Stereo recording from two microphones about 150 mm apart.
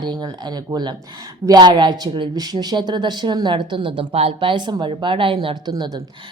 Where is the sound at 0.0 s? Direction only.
30° right (ahead or behind).